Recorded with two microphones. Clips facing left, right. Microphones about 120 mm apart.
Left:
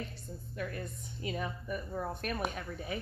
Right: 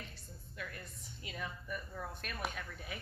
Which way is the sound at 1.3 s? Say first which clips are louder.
Left 5 dB; 40° left (ahead or behind).